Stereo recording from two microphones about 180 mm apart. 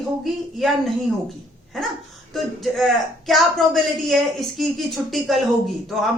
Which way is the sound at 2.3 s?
Centre (ahead or behind).